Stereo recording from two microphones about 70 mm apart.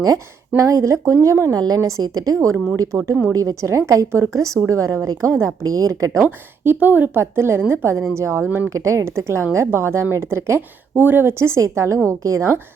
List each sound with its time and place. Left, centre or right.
0.5 s speech: right
1.6 s a woman's voice: right
3.1 s a woman's voice: right
6.2 s a woman's voice: right
7.2 s a woman's voice: right
8.4 s a woman's voice: right
8.8 s a woman's voice: right